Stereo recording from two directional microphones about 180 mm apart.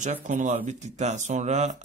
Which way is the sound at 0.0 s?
45° right (ahead or behind).